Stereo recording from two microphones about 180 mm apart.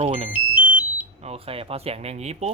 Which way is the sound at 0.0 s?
30° right (ahead or behind).